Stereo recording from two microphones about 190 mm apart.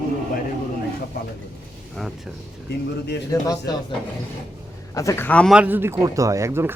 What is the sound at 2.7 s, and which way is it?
Speech, 60° left (ahead or behind).